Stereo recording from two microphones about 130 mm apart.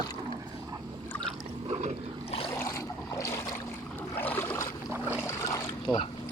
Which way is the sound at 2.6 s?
25° left (ahead or behind).